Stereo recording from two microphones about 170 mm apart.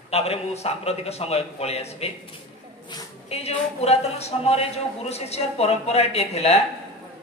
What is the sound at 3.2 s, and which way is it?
A woman's voice, 40° left (ahead or behind).